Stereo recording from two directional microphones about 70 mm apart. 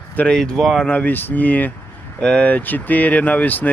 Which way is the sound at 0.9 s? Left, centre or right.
Left.